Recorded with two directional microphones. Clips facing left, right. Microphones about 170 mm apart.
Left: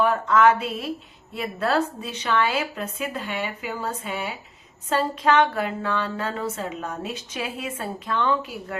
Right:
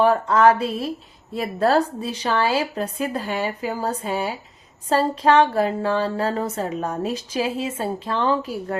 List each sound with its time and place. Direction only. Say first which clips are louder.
0.0 s speech: right 3 dB; 35° right (ahead or behind)